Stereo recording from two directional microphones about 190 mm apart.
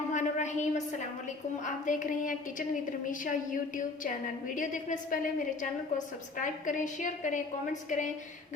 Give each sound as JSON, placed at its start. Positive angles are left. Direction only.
{"t": 0.1, "sound": "a sound", "side_deg": 40}
{"t": 1.6, "sound": "a woman's voice", "side_deg": 40}
{"t": 6.3, "sound": "a woman's voice", "side_deg": 45}